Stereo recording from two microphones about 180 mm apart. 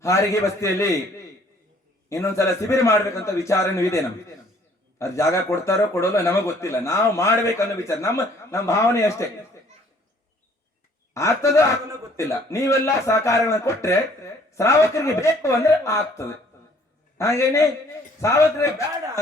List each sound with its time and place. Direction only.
0.0 s speech: 15° left (ahead or behind)
11.1 s speech: 15° left (ahead or behind)